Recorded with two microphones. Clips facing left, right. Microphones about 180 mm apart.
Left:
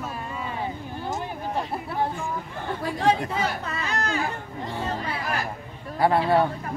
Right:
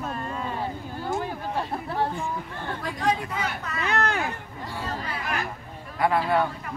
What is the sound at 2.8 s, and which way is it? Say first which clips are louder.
Speech: left 4 dB; 30° left (ahead or behind).